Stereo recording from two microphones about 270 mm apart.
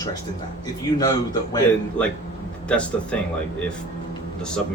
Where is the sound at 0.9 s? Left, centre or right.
Centre.